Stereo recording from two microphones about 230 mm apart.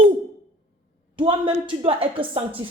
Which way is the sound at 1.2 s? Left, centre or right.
Right.